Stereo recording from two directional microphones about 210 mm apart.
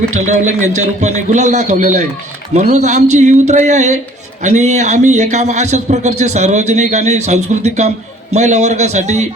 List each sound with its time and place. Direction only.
0.1 s a man's voice: 35° right (ahead or behind)